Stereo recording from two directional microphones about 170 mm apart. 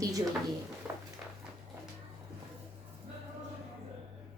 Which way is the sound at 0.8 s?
5° right (ahead or behind).